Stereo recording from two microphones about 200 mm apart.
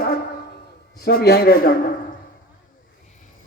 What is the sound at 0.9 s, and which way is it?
Speech, 50° left (ahead or behind).